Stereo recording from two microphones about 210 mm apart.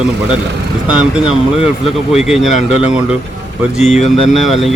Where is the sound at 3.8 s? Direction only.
30° left (ahead or behind).